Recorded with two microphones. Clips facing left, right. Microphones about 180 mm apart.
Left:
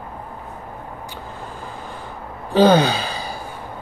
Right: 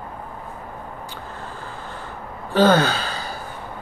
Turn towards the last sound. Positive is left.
turn(degrees=15)  # may be behind; listen again after turning